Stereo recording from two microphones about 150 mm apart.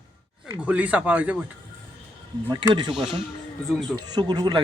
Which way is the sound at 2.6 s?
30° right (ahead or behind).